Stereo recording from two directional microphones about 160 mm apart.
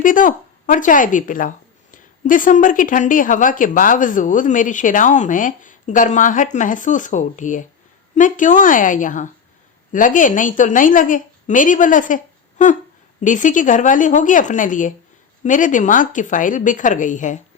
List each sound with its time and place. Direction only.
0.0 s speech: 55° left (ahead or behind)